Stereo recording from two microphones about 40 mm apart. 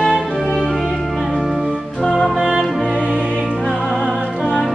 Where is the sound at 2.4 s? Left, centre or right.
Centre.